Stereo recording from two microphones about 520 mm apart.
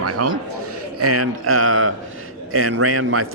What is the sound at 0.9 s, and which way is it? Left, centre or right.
A man's voice, right.